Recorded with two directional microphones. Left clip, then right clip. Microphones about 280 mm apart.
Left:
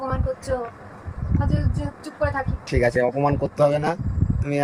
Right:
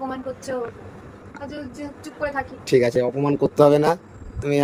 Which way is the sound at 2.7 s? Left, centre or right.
Centre.